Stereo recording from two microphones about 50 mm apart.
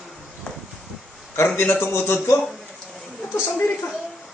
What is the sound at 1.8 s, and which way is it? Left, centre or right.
Speech, left.